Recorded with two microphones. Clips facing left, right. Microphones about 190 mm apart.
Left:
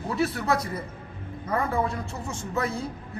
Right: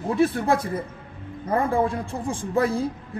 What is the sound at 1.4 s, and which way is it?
A woman's voice, 30° right (ahead or behind).